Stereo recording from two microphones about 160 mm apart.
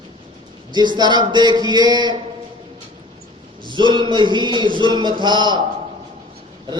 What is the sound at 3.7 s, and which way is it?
Mantra, 30° right (ahead or behind).